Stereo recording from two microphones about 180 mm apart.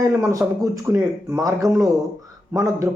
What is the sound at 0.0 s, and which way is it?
Speech, 15° right (ahead or behind).